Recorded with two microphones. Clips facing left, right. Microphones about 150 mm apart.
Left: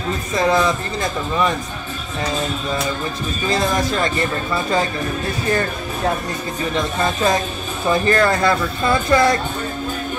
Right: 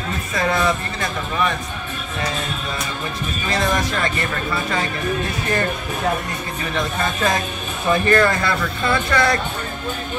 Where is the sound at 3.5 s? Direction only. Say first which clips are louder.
Left 2 dB; 35° left (ahead or behind).